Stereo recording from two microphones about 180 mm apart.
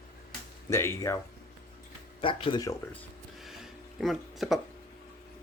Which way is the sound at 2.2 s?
30° left (ahead or behind).